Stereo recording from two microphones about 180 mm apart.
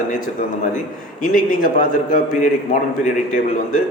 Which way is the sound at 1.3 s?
50° left (ahead or behind).